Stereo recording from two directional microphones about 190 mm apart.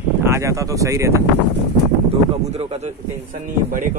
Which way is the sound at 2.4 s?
35° right (ahead or behind).